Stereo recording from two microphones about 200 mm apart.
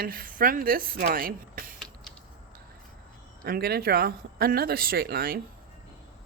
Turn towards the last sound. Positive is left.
turn(degrees=-50)  # may be behind; listen again after turning